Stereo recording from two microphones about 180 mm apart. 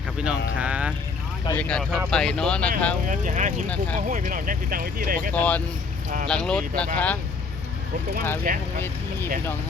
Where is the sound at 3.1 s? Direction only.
45° right (ahead or behind).